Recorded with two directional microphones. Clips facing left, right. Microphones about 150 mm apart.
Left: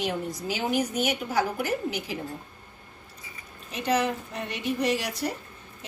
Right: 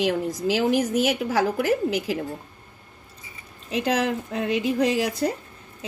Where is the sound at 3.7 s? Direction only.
90° right.